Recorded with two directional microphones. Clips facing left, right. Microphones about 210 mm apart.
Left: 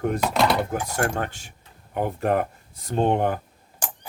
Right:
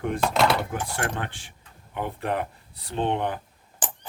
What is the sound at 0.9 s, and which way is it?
Speech, 45° left (ahead or behind).